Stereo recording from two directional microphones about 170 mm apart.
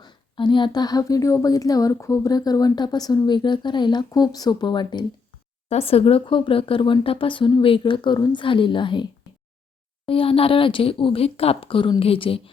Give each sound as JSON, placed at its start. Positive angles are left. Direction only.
{"t": 0.0, "sound": "speech", "side_deg": 25}
{"t": 5.6, "sound": "speech", "side_deg": 35}
{"t": 10.1, "sound": "speech", "side_deg": 35}